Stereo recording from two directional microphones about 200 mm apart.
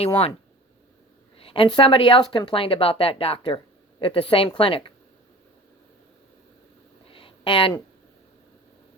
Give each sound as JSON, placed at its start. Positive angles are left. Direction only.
{"t": 0.0, "sound": "speech", "side_deg": 30}
{"t": 1.4, "sound": "speech", "side_deg": 25}
{"t": 7.1, "sound": "a sound", "side_deg": 25}